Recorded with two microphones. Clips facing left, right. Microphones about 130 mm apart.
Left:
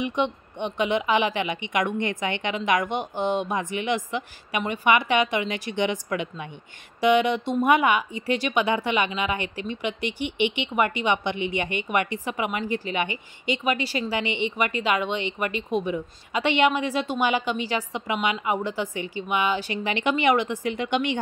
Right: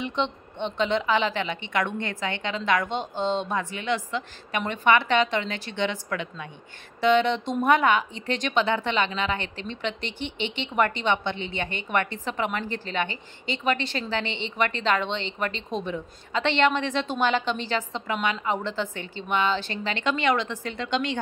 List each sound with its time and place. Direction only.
0.0 s speech: 15° left (ahead or behind)